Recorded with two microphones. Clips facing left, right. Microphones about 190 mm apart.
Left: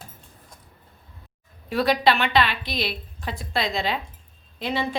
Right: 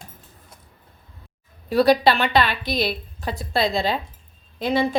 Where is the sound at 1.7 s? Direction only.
35° right (ahead or behind).